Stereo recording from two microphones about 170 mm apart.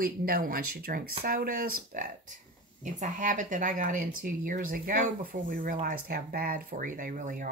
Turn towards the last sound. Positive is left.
turn(degrees=-50)  # may be behind; listen again after turning